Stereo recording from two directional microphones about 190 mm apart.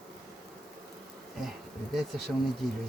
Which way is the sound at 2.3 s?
5° right (ahead or behind).